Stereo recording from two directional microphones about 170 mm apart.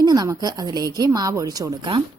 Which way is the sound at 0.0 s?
25° right (ahead or behind).